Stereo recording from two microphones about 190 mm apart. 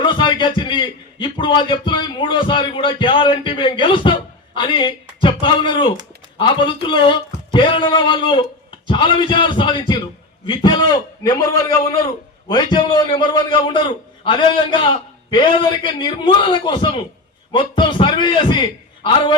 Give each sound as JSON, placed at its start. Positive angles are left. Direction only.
{"t": 0.0, "sound": "a man's voice", "side_deg": 25}